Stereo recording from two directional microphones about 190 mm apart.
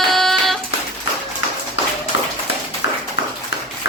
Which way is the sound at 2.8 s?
75° left (ahead or behind).